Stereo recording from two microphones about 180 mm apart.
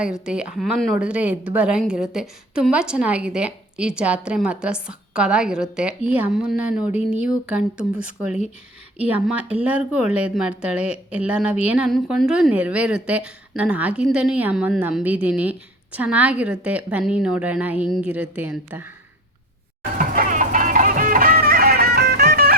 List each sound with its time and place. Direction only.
0.0 s a woman's voice: 5° right (ahead or behind)
20.0 s music: 50° right (ahead or behind)